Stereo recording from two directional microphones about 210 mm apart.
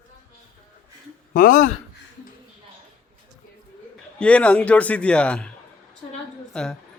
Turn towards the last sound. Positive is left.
turn(degrees=5)  # may be behind; listen again after turning